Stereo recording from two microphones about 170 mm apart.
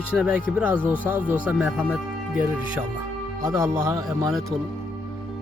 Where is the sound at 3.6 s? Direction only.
15° right (ahead or behind).